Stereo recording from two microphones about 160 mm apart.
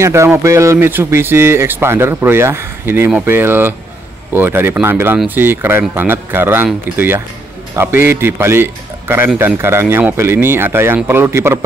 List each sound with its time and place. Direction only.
0.0 s a man's voice: 15° right (ahead or behind)